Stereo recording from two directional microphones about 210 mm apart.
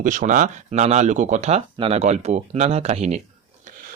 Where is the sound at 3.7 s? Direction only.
35° right (ahead or behind).